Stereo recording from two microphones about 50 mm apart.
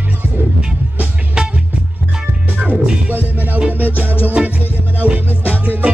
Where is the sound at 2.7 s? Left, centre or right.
Right.